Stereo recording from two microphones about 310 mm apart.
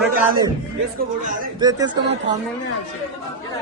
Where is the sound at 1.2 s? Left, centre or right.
Right.